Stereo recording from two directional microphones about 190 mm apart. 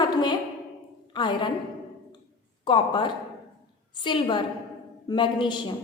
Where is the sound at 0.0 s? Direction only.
25° left (ahead or behind).